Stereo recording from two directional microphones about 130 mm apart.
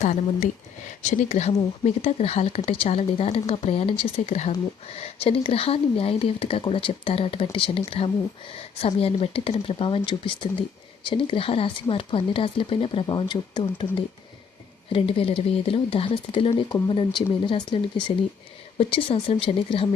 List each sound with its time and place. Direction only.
0.0 s speech: 60° left (ahead or behind); by 17.7 s 40° left (ahead or behind)
18.8 s speech: 45° left (ahead or behind)